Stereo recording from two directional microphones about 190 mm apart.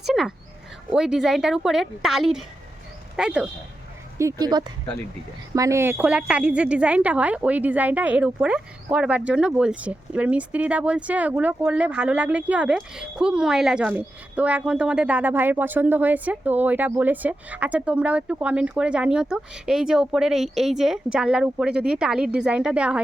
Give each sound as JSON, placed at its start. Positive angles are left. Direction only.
{"t": 0.0, "sound": "speech", "side_deg": 0}
{"t": 4.2, "sound": "a woman's voice", "side_deg": -20}